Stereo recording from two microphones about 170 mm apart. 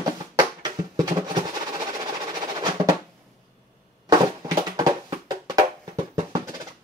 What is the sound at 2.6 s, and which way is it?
Drum roll, 20° right (ahead or behind).